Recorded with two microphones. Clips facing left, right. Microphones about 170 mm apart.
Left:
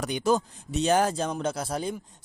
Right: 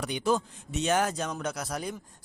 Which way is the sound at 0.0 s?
45° left (ahead or behind).